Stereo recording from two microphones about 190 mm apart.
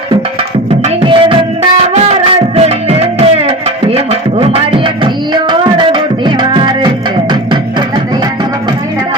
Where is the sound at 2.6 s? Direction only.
35° right (ahead or behind).